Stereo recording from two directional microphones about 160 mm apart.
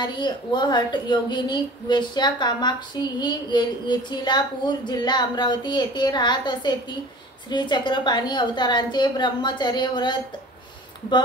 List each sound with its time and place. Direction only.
0.0 s a woman's voice: 30° left (ahead or behind)